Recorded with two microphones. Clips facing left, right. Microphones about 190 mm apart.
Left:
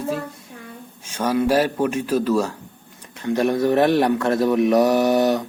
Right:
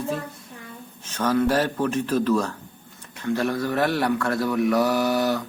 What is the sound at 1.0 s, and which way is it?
Speech, 10° left (ahead or behind).